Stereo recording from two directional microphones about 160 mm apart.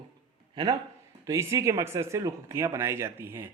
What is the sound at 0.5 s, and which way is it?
Speech, 25° right (ahead or behind).